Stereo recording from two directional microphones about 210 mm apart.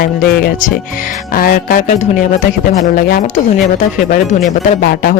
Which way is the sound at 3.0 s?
40° left (ahead or behind).